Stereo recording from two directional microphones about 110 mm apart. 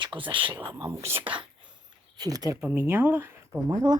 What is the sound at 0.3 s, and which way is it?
Speech, 50° right (ahead or behind).